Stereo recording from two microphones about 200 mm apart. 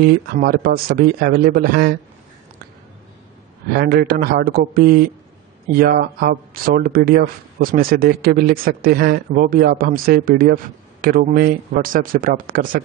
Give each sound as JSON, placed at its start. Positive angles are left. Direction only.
{"t": 0.3, "sound": "speech", "side_deg": -50}
{"t": 3.7, "sound": "speech", "side_deg": -50}